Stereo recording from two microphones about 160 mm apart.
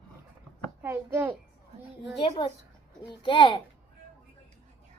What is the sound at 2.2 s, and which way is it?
A child's voice, 30° left (ahead or behind).